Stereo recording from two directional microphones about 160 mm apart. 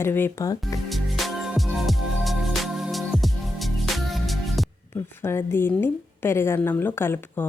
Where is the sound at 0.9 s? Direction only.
Centre (ahead or behind).